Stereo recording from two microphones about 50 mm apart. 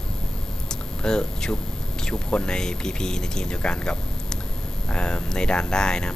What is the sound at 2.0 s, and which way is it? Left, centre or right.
Speech, centre.